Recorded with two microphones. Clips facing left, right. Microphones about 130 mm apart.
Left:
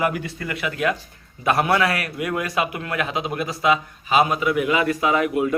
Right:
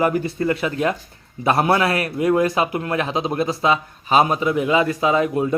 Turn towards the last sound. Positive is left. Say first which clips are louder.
# right 2 dB
turn(degrees=-25)  # may be behind; listen again after turning